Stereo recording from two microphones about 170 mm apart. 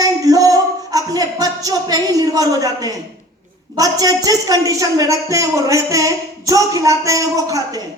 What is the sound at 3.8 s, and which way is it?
Speech, 20° right (ahead or behind).